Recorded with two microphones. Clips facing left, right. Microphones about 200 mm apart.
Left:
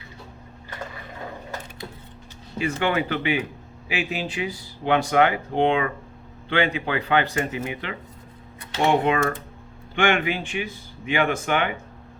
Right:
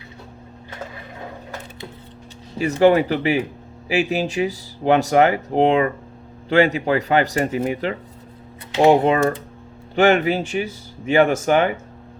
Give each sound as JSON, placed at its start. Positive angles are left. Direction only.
{"t": 2.6, "sound": "speech", "side_deg": -40}